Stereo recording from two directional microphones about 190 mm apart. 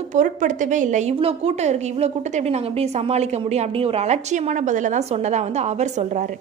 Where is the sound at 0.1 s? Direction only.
40° right (ahead or behind).